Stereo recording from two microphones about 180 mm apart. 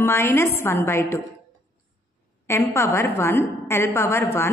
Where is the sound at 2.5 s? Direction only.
15° left (ahead or behind).